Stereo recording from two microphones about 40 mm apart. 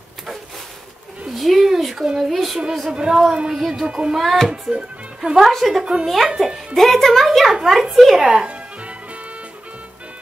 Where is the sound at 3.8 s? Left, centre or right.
Right.